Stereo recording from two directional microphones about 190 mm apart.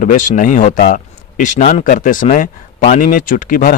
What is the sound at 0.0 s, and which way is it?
Speech, 40° left (ahead or behind).